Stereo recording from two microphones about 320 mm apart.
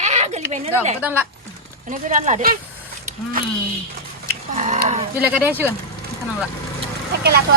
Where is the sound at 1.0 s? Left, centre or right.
Centre.